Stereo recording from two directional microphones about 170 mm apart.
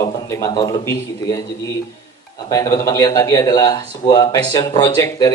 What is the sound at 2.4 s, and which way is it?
Speech, 20° left (ahead or behind).